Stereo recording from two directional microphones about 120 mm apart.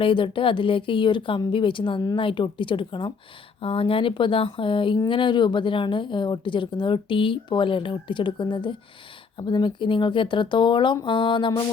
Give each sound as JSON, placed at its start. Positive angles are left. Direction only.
{"t": 0.0, "sound": "speech", "side_deg": 45}